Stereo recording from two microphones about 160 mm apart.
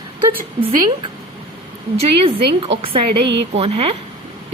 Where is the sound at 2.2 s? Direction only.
35° right (ahead or behind).